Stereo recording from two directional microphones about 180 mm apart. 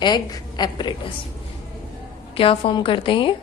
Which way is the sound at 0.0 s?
20° left (ahead or behind).